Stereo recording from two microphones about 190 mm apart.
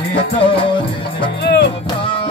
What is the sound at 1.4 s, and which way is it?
Music, 65° left (ahead or behind).